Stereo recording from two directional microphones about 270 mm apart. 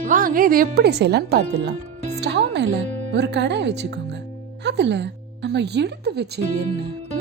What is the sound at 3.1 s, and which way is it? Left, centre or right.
A woman's voice, right.